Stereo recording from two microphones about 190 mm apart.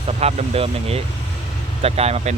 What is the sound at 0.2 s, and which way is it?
Speech, 30° right (ahead or behind).